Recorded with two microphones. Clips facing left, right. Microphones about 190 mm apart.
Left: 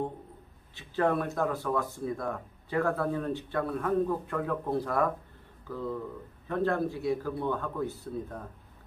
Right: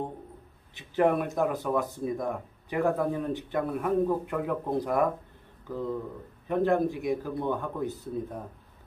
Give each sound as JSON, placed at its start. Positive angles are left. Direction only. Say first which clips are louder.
{"t": 0.7, "sound": "speech", "louder": "right 3 dB", "side_deg": -15}